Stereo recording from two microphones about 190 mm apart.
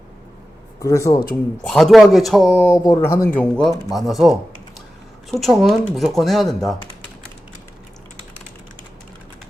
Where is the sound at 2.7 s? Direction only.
15° left (ahead or behind); by 6.7 s centre (ahead or behind).